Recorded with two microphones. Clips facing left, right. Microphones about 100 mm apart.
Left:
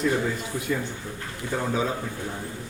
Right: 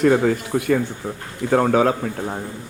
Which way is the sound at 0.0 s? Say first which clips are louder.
Right 9 dB; 70° right (ahead or behind).